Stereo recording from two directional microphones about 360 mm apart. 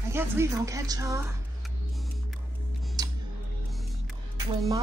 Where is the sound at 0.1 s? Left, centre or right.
Centre.